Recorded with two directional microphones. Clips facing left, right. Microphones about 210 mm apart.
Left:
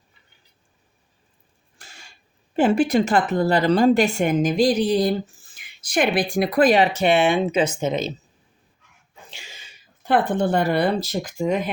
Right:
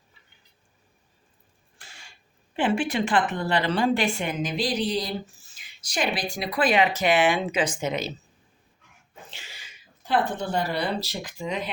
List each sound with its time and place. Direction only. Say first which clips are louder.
1.8 s a sound: left 3 dB; 45° left (ahead or behind)
2.6 s a woman's voice: left 7 dB; 40° left (ahead or behind); by 8.1 s 25° left (ahead or behind)
9.3 s sneeze: left 2 dB; 15° left (ahead or behind)
10.0 s a woman's voice: left 6 dB; 55° left (ahead or behind)